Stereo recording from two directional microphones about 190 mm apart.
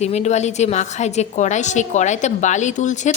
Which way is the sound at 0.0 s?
35° left (ahead or behind).